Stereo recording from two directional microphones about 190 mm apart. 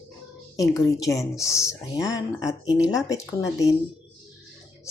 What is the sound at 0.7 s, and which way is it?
Speech, 15° left (ahead or behind).